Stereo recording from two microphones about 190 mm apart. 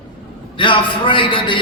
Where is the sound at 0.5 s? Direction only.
25° left (ahead or behind).